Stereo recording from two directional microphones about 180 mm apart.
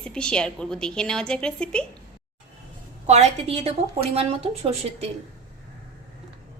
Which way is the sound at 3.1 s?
35° right (ahead or behind).